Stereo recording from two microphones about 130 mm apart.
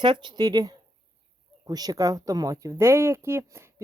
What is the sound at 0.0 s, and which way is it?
Speech, 35° right (ahead or behind).